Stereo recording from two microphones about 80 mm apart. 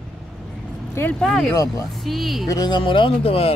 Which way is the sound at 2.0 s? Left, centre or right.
Centre.